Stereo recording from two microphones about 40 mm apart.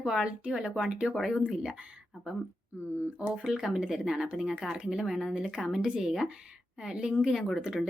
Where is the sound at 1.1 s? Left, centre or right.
Centre.